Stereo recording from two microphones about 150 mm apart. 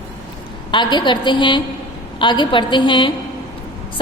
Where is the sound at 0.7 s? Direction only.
30° left (ahead or behind).